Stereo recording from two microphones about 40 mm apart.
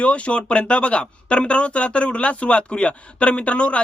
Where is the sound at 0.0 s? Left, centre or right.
Left.